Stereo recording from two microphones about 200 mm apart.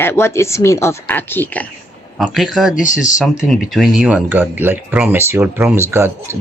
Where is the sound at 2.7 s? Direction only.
40° left (ahead or behind).